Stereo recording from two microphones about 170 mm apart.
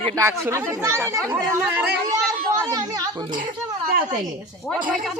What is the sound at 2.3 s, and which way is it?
Children playing, 20° right (ahead or behind).